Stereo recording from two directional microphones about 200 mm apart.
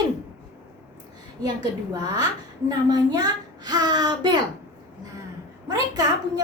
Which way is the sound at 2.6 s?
20° right (ahead or behind).